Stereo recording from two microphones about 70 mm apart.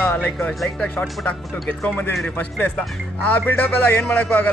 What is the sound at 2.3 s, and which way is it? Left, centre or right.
Speech, left.